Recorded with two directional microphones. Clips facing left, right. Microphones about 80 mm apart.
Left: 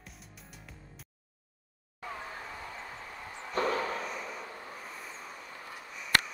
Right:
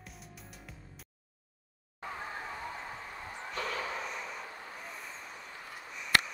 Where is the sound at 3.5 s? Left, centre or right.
Left.